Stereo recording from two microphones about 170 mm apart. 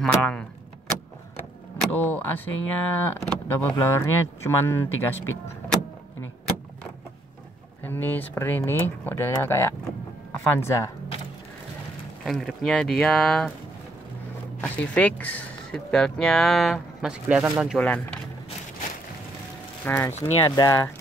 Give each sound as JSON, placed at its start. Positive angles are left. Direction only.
{"t": 0.0, "sound": "speech", "side_deg": 5}
{"t": 1.8, "sound": "speech", "side_deg": 10}
{"t": 7.8, "sound": "speech", "side_deg": 10}
{"t": 9.8, "sound": "power windows", "side_deg": 15}
{"t": 12.3, "sound": "speech", "side_deg": 0}
{"t": 14.6, "sound": "speech", "side_deg": 10}
{"t": 17.7, "sound": "speech", "side_deg": 5}
{"t": 19.8, "sound": "speech", "side_deg": 15}